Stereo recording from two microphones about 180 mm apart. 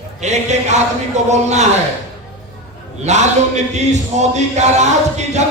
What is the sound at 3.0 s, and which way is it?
Speech, 40° right (ahead or behind).